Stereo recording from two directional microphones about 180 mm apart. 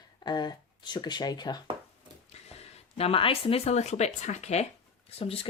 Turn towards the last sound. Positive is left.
turn(degrees=30)  # may be behind; listen again after turning